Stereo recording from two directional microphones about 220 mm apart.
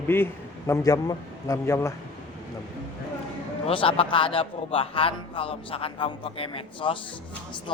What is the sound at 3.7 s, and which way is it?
A man's voice, 25° left (ahead or behind).